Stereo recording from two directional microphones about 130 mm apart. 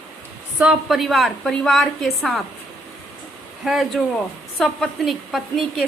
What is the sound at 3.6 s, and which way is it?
A woman's voice, centre (ahead or behind).